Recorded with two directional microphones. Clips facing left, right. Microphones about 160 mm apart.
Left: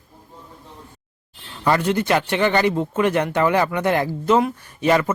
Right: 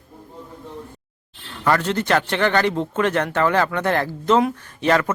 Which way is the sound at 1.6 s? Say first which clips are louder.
Left 1 dB; 15° left (ahead or behind).